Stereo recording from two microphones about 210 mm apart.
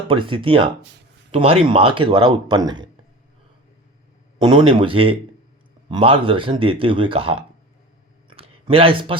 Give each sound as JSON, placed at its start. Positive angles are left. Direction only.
{"t": 0.1, "sound": "speech", "side_deg": -25}
{"t": 4.4, "sound": "speech", "side_deg": -20}
{"t": 8.3, "sound": "a sound", "side_deg": -25}